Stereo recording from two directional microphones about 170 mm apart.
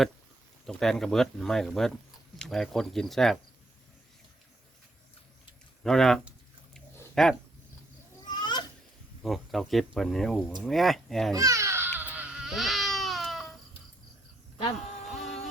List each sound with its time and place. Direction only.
0.6 s speech: centre (ahead or behind)
5.8 s speech: 5° left (ahead or behind)
8.3 s a sound: 25° left (ahead or behind)
9.2 s speech: centre (ahead or behind)
11.3 s baby cry: 20° right (ahead or behind); by 13.6 s centre (ahead or behind)
15.0 s a sound: centre (ahead or behind)